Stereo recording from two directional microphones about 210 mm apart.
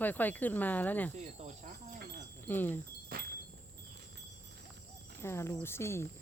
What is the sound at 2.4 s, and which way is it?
Speech, 10° left (ahead or behind).